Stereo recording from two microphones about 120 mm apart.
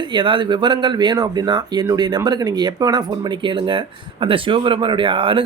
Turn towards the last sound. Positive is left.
turn(degrees=-45)  # may be behind; listen again after turning